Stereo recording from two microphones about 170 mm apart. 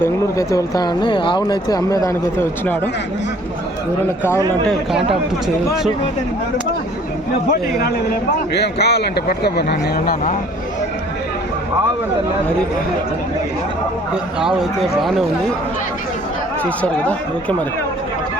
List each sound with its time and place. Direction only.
0.0 s speech: 20° left (ahead or behind)
4.7 s a man's voice: centre (ahead or behind)
8.5 s speech: 75° left (ahead or behind)
14.4 s a man's voice: centre (ahead or behind)
16.6 s speech: 5° left (ahead or behind)